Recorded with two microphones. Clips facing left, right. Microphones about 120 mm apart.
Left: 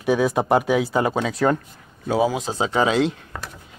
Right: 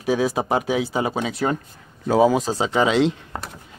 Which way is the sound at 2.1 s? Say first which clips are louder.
Right 4 dB; 40° right (ahead or behind).